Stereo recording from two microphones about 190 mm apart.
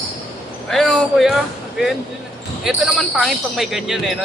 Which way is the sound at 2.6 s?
Centre (ahead or behind).